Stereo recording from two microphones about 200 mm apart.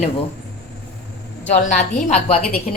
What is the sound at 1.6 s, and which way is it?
Speech, 40° left (ahead or behind).